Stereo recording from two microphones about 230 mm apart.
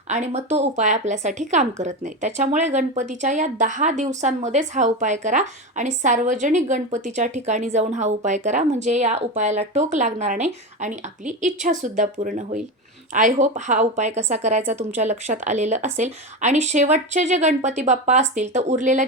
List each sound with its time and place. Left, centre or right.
0.1 s a woman's voice: right